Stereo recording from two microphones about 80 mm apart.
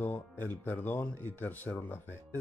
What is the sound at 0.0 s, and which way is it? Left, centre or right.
Speech, left.